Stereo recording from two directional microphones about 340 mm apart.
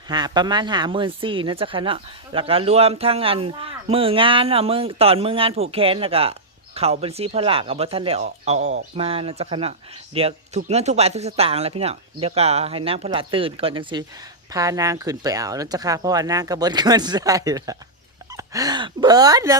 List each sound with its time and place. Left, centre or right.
0.1 s speech: centre